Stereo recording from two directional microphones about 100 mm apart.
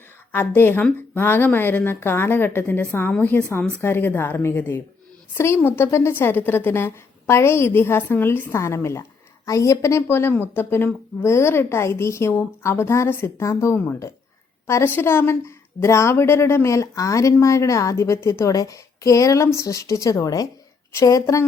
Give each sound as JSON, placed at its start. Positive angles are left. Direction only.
{"t": 0.3, "sound": "a woman's voice", "side_deg": 20}